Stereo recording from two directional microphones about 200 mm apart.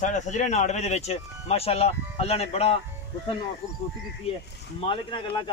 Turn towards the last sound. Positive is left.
turn(degrees=25)  # may be behind; listen again after turning